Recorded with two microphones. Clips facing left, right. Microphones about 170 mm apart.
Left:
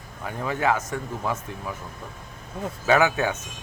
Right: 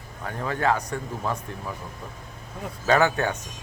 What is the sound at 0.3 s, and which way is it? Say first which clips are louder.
Speech: even; 10° left (ahead or behind).